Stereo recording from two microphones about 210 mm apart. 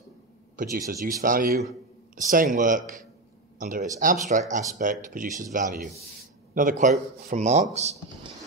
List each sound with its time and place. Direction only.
0.8 s a man's voice: 40° right (ahead or behind)
5.8 s speech: centre (ahead or behind)
6.5 s a man's voice: 40° right (ahead or behind)